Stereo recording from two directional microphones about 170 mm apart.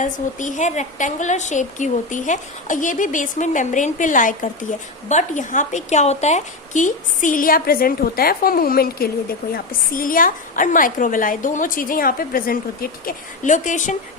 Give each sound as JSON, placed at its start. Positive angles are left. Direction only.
{"t": 0.0, "sound": "a woman's voice", "side_deg": 45}